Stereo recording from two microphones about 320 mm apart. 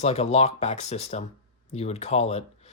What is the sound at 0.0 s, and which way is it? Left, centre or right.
Speech, centre.